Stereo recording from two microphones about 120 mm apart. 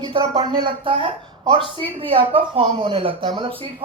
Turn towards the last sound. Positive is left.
turn(degrees=-45)  # may be behind; listen again after turning